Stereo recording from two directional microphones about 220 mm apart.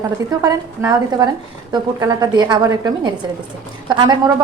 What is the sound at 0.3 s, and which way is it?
A woman's voice, 15° right (ahead or behind).